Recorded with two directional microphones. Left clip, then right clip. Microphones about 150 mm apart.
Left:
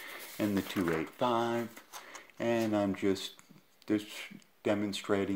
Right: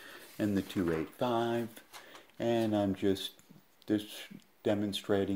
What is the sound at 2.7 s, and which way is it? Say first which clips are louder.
Speech: even; 15° right (ahead or behind).